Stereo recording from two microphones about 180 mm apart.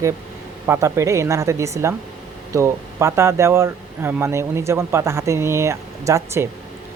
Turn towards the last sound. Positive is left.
turn(degrees=-15)  # may be behind; listen again after turning